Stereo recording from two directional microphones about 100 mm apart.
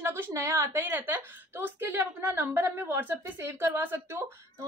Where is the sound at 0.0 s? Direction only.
25° right (ahead or behind).